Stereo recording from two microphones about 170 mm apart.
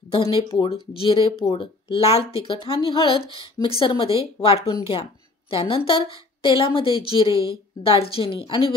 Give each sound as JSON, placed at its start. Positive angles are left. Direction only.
{"t": 0.1, "sound": "speech", "side_deg": 30}